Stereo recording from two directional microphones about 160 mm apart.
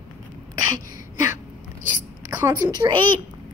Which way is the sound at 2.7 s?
30° right (ahead or behind).